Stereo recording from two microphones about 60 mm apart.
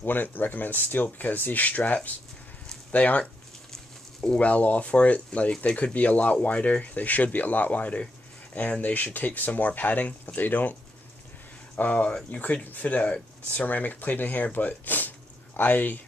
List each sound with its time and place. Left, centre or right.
0.0 s speech: left
3.7 s a sound: centre
4.4 s speech: left